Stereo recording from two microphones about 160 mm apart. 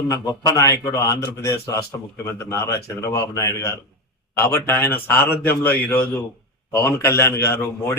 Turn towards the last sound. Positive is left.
turn(degrees=15)  # may be behind; listen again after turning